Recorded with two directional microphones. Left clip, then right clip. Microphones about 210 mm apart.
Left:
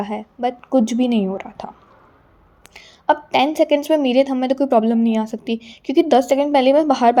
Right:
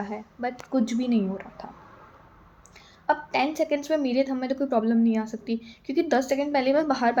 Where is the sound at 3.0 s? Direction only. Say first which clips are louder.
Left 8 dB; 35° left (ahead or behind).